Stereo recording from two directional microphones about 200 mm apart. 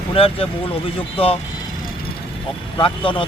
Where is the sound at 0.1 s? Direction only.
30° left (ahead or behind).